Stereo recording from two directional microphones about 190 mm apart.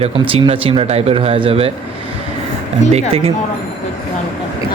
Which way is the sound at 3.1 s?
30° right (ahead or behind).